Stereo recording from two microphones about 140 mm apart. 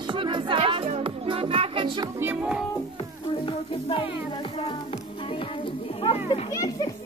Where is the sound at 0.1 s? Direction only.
35° right (ahead or behind).